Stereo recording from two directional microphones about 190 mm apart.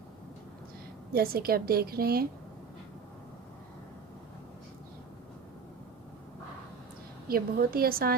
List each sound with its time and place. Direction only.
1.1 s a woman's voice: 55° right (ahead or behind)
7.3 s a woman's voice: 50° right (ahead or behind)